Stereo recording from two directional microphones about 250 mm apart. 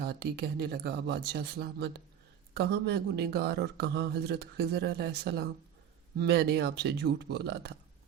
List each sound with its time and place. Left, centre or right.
0.0 s speech: right